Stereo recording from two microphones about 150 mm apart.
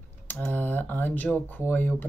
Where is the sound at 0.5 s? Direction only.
10° left (ahead or behind).